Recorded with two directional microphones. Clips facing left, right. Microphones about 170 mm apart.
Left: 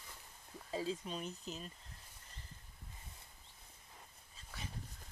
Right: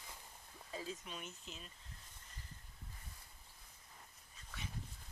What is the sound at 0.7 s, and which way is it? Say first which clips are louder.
Speech: left 7 dB; 30° left (ahead or behind).